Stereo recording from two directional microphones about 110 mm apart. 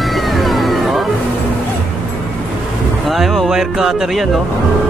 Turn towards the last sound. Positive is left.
turn(degrees=-5)  # may be behind; listen again after turning